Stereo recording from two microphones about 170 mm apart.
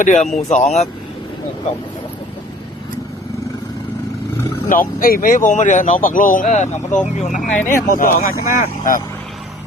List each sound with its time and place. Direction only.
0.0 s speech: 45° left (ahead or behind)
4.7 s speech: 55° left (ahead or behind)
7.5 s speech: 10° left (ahead or behind)
7.9 s speech: 50° left (ahead or behind)